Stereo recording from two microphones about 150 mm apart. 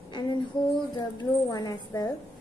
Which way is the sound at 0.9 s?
25° left (ahead or behind).